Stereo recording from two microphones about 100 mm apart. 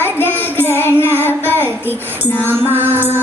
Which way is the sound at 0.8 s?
20° left (ahead or behind).